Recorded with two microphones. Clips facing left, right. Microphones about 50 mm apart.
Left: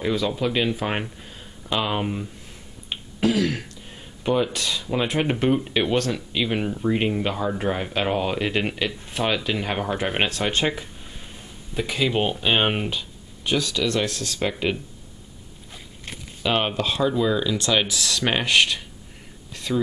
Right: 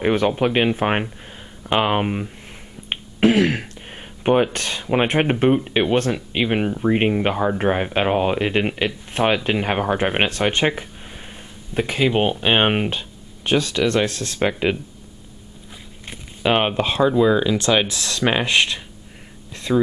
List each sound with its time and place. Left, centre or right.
0.0 s speech: right
2.9 s a sound: right
5.3 s speech: right
16.4 s speech: right
18.2 s speech: centre
18.5 s speech: right